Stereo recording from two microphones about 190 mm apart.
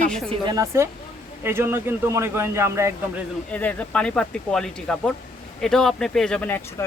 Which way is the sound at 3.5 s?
5° left (ahead or behind).